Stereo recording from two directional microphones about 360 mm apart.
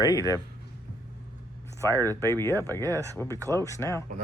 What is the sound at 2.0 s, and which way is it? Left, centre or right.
Speech, centre.